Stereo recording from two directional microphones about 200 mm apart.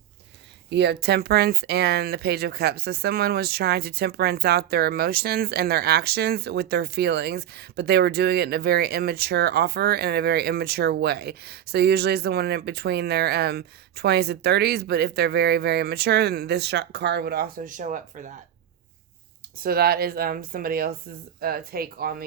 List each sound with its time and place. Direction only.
0.7 s speech: 55° right (ahead or behind); by 18.3 s 40° right (ahead or behind)
19.6 s speech: 50° right (ahead or behind)